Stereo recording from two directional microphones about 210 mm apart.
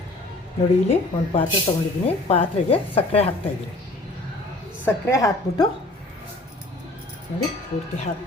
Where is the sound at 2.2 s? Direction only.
30° left (ahead or behind).